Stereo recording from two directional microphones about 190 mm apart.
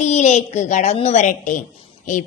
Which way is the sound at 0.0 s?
35° left (ahead or behind).